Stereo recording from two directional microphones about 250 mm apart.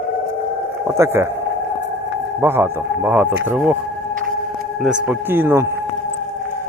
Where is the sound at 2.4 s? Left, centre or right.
Centre.